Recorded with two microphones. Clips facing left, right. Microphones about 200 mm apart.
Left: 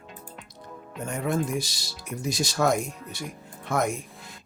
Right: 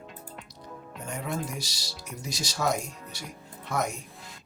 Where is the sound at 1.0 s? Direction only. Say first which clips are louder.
Left 6 dB; 50° left (ahead or behind).